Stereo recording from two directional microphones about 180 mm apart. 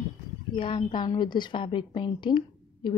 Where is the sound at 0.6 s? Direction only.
30° left (ahead or behind).